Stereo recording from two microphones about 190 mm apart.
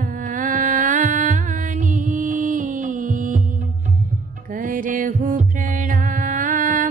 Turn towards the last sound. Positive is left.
turn(degrees=-45)  # may be behind; listen again after turning